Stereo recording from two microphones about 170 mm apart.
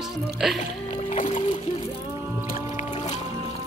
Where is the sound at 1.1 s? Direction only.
50° left (ahead or behind).